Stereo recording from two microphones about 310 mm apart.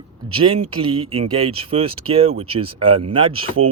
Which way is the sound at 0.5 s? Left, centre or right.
Right.